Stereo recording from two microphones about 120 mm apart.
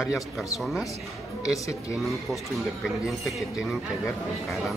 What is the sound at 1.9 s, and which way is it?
Speech, centre (ahead or behind).